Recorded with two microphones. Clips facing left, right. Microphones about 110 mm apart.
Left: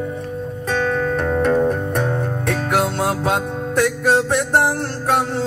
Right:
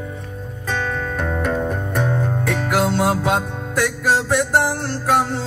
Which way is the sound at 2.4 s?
30° right (ahead or behind).